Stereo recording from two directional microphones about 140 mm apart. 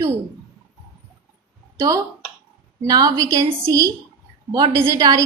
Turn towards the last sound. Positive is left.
turn(degrees=-25)  # may be behind; listen again after turning